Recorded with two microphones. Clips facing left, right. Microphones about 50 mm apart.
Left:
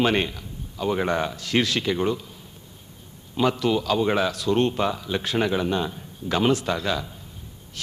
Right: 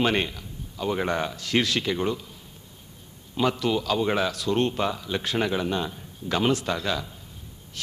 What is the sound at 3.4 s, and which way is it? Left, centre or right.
A man's voice, centre.